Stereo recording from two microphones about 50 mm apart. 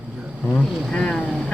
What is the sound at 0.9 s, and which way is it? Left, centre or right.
Speech, centre.